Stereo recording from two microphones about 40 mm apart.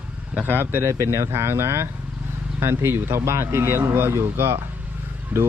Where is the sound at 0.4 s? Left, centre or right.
Right.